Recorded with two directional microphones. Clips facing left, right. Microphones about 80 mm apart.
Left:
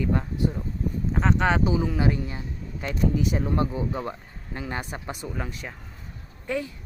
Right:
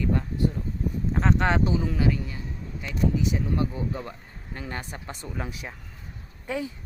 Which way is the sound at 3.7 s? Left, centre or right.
Centre.